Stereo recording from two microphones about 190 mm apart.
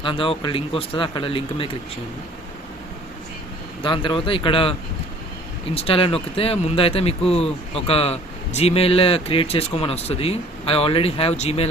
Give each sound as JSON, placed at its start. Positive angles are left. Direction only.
{"t": 0.0, "sound": "speech", "side_deg": 25}
{"t": 3.8, "sound": "speech", "side_deg": 25}
{"t": 5.7, "sound": "speech", "side_deg": 30}